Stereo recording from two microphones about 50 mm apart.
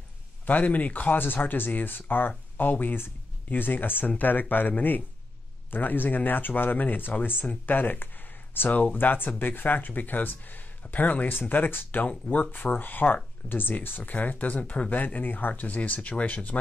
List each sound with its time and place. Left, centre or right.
0.5 s speech: left